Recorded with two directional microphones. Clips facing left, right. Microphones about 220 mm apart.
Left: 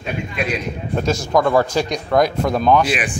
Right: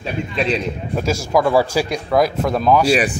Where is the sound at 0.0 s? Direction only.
30° right (ahead or behind).